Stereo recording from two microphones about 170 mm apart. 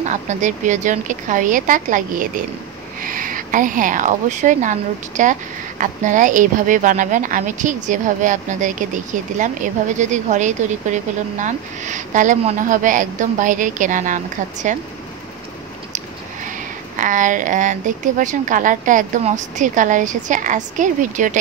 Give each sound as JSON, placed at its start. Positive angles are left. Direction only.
{"t": 0.1, "sound": "a woman's voice", "side_deg": -45}
{"t": 17.0, "sound": "a woman's voice", "side_deg": -50}